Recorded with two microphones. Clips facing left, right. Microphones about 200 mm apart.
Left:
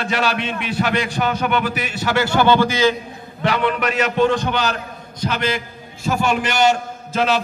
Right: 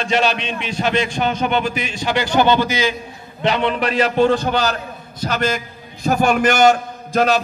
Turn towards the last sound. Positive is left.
turn(degrees=-45)  # may be behind; listen again after turning